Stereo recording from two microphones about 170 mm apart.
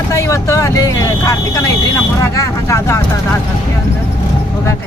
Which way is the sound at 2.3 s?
15° left (ahead or behind).